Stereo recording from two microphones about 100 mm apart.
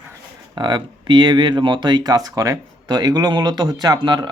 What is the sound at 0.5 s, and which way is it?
Speech, 45° right (ahead or behind).